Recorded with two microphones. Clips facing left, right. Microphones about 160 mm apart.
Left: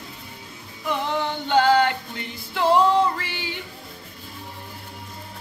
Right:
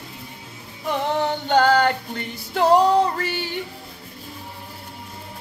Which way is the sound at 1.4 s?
45° right (ahead or behind).